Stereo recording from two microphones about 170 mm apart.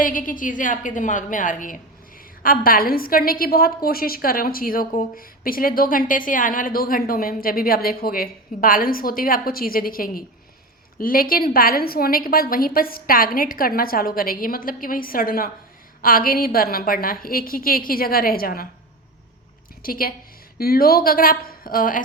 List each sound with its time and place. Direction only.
0.0 s a woman's voice: 50° left (ahead or behind)
19.8 s a woman's voice: 60° left (ahead or behind)